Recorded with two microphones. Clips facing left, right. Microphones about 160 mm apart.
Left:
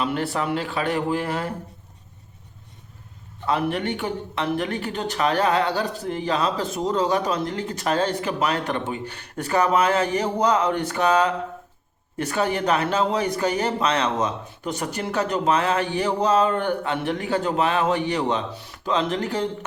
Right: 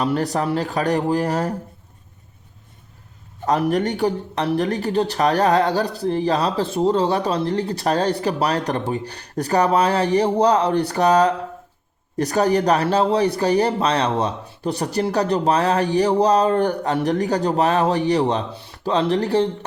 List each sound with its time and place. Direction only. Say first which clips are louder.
0.0 s speech: right 4 dB; 40° right (ahead or behind)
3.4 s speech: right 4 dB; 40° right (ahead or behind)